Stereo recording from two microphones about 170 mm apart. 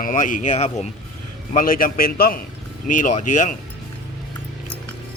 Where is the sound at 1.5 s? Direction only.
55° left (ahead or behind).